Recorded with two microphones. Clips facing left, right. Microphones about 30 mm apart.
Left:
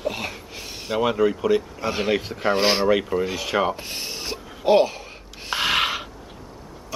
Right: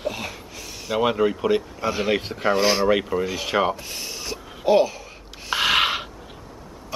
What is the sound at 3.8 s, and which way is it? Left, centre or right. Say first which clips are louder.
Speech: left 1 dB; left.